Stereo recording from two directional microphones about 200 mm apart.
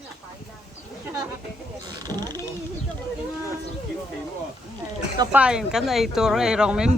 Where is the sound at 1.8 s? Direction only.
20° right (ahead or behind).